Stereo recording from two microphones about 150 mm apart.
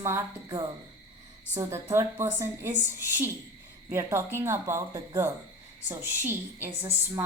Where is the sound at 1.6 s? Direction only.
15° right (ahead or behind).